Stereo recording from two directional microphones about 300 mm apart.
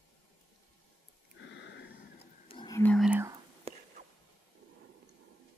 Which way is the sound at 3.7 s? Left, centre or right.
Centre.